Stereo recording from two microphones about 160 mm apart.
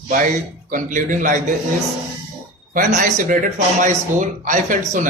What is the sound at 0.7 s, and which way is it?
Speech, 55° right (ahead or behind).